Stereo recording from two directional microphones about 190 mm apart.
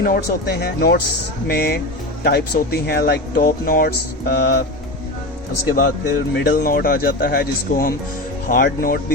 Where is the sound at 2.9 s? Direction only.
55° left (ahead or behind).